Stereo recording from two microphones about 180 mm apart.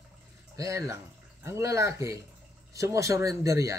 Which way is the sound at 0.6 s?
15° right (ahead or behind).